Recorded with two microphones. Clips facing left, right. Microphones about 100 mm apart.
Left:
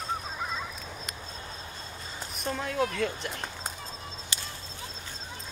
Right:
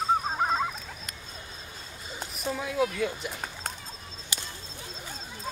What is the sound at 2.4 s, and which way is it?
Speech, 5° right (ahead or behind).